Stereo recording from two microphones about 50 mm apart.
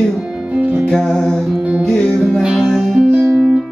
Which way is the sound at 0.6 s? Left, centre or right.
Right.